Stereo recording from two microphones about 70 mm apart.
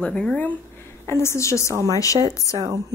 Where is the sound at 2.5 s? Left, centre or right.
Right.